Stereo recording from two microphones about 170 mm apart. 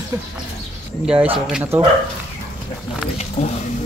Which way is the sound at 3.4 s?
40° left (ahead or behind).